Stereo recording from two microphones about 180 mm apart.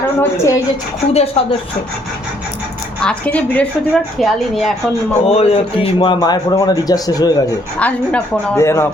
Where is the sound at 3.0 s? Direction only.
5° left (ahead or behind).